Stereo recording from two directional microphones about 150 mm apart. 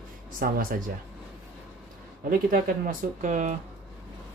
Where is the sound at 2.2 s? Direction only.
70° right (ahead or behind).